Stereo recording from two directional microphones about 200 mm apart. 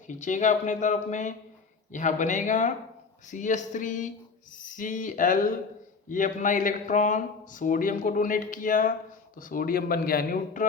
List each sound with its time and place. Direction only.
0.1 s a man's voice: 40° left (ahead or behind)